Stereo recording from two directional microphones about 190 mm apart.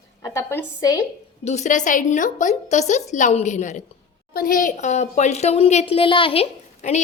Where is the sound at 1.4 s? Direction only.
35° left (ahead or behind).